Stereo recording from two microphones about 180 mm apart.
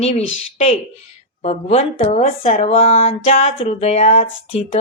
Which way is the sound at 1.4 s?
35° left (ahead or behind).